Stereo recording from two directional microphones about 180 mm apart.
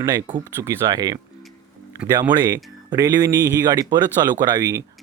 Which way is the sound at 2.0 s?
5° right (ahead or behind).